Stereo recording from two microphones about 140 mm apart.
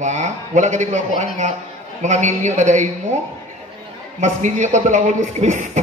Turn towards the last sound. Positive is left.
turn(degrees=-60)  # may be behind; listen again after turning